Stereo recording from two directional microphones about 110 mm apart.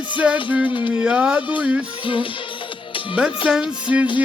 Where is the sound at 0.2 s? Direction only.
10° right (ahead or behind).